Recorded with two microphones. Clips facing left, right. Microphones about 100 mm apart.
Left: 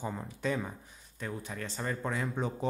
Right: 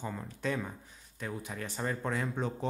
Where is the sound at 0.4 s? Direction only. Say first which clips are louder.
Left 1 dB; 5° left (ahead or behind).